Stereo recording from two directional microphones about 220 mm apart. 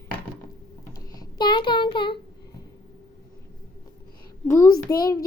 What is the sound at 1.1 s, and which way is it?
Child singing, 20° left (ahead or behind).